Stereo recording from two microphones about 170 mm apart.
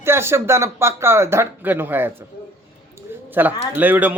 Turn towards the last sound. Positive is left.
turn(degrees=-10)  # may be behind; listen again after turning